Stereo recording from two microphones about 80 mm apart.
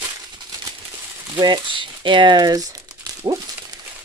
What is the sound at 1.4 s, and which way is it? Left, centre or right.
Speech, right.